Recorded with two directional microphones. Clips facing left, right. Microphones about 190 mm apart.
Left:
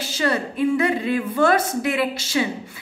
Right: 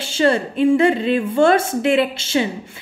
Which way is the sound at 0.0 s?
25° right (ahead or behind).